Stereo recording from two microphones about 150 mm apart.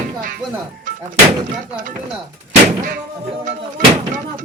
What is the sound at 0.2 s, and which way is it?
Speech, 65° right (ahead or behind).